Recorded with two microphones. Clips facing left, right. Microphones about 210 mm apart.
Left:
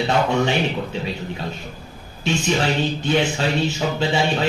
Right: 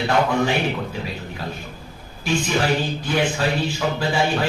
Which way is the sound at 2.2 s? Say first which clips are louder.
Even; 25° left (ahead or behind).